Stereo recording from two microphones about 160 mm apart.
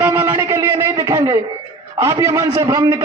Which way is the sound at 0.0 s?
15° right (ahead or behind).